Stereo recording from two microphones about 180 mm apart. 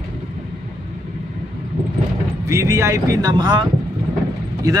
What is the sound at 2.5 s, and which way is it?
Speech, 15° right (ahead or behind).